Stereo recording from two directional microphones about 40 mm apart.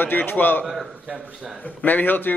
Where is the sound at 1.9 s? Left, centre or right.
Left.